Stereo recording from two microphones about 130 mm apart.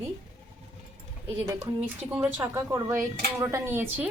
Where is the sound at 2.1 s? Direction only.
15° right (ahead or behind).